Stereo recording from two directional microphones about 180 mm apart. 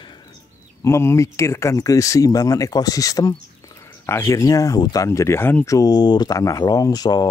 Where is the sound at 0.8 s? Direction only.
15° left (ahead or behind).